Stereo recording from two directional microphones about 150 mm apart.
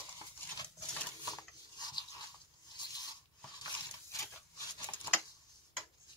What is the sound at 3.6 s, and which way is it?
Dog, 20° left (ahead or behind).